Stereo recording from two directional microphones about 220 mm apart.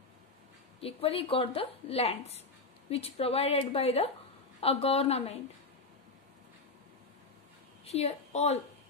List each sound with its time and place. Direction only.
0.7 s speech: 25° left (ahead or behind)
7.8 s a woman's voice: 30° left (ahead or behind)